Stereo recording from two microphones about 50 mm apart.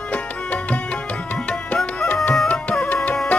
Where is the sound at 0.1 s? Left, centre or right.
Left.